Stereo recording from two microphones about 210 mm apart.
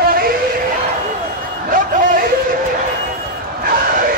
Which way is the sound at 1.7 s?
40° right (ahead or behind).